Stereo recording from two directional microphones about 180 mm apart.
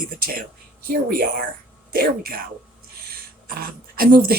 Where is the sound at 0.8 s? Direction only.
55° right (ahead or behind).